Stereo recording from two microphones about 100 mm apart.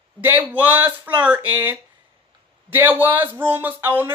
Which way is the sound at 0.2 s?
20° right (ahead or behind).